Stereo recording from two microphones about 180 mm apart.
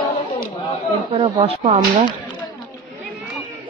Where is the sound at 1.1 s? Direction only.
35° right (ahead or behind).